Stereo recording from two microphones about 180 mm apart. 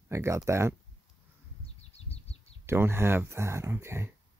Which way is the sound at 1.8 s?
35° left (ahead or behind).